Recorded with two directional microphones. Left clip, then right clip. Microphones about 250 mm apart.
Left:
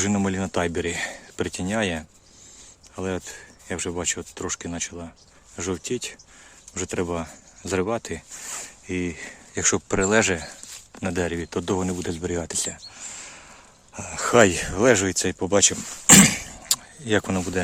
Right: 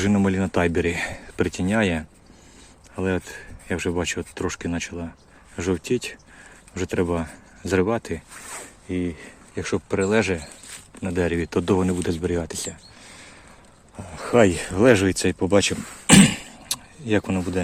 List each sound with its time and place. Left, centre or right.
0.0 s speech: centre
8.9 s speech: centre
11.2 s speech: centre
13.1 s a sound: left
13.9 s speech: centre